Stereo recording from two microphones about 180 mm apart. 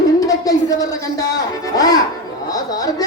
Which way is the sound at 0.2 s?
20° left (ahead or behind).